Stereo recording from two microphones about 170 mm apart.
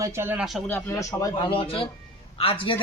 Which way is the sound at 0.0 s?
15° right (ahead or behind).